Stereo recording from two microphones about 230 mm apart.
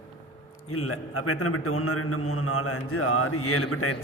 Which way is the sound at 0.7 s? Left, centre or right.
Left.